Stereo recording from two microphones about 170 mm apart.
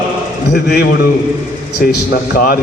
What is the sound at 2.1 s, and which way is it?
Speech, 60° left (ahead or behind).